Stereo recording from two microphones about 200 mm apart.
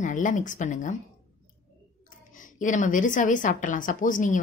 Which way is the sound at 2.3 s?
40° left (ahead or behind).